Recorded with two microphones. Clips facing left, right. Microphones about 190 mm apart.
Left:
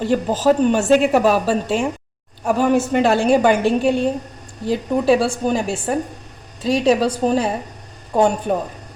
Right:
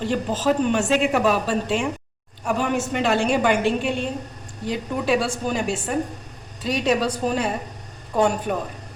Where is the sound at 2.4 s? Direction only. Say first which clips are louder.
Left 6 dB; 40° left (ahead or behind).